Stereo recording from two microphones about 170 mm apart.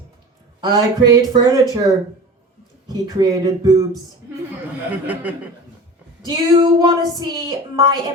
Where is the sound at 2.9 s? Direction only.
20° right (ahead or behind).